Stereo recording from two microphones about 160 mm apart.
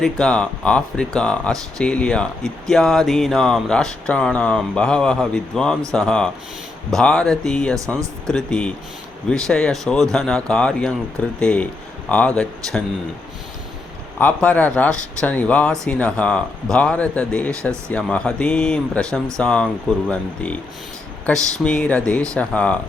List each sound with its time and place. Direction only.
0.0 s speech: 5° left (ahead or behind)
14.2 s speech: 10° left (ahead or behind)
21.6 s speech: 5° left (ahead or behind)